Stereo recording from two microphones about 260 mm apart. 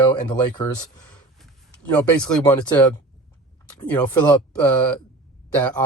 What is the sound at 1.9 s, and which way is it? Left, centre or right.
Speech, centre.